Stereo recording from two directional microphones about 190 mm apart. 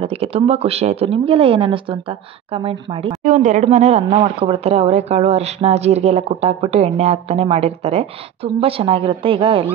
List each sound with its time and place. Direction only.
0.0 s speech: 30° right (ahead or behind)